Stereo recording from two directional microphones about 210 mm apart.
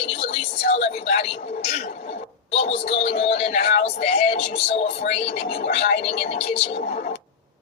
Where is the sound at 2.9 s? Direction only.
30° left (ahead or behind).